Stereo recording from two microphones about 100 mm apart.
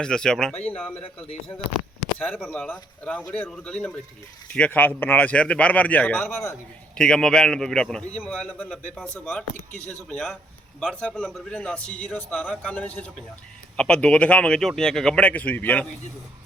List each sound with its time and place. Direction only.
0.0 s a man's voice: 5° left (ahead or behind)
0.9 s a man's voice: 90° left
2.5 s a man's voice: 15° left (ahead or behind)
6.9 s a man's voice: 5° left (ahead or behind)